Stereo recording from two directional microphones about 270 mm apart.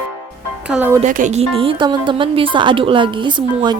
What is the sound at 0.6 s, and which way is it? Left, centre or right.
Speech, centre.